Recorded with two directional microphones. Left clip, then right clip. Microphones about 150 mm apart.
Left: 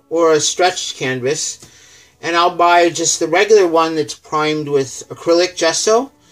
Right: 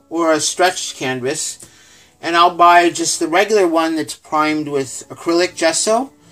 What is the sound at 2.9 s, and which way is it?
Speech, 25° right (ahead or behind).